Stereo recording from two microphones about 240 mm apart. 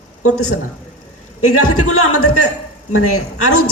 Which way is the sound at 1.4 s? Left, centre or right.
Left.